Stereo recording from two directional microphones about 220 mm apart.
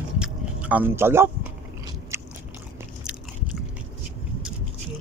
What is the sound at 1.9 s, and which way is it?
Biting, 15° right (ahead or behind).